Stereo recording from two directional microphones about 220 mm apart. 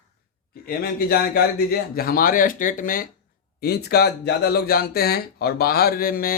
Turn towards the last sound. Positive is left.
turn(degrees=40)  # may be behind; listen again after turning